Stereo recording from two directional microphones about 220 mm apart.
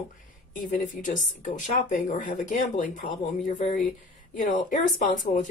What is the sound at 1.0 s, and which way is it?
Speech, 35° left (ahead or behind).